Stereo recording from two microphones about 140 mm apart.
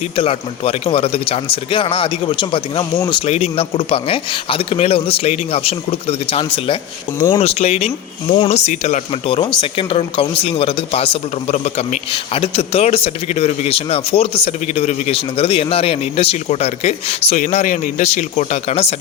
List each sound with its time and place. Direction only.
0.2 s a man's voice: 40° left (ahead or behind)
3.2 s speech: 50° left (ahead or behind)
9.2 s a man's voice: 40° left (ahead or behind)
17.3 s speech: 60° left (ahead or behind)